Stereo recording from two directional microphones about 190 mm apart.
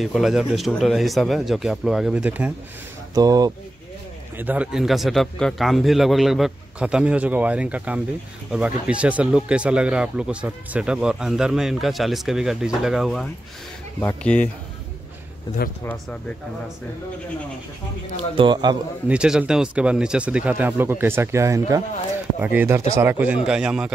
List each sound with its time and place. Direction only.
0.0 s speech: centre (ahead or behind)
3.2 s speech: 20° right (ahead or behind)
4.4 s speech: 10° right (ahead or behind); by 14.5 s 5° left (ahead or behind)
15.8 s speech: 10° left (ahead or behind)
18.1 s speech: 25° right (ahead or behind)
19.0 s speech: 5° right (ahead or behind)